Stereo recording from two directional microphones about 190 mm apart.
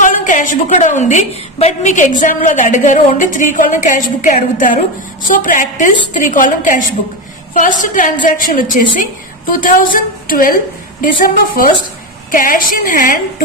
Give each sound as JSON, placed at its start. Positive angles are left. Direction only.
{"t": 0.0, "sound": "a woman's voice", "side_deg": 45}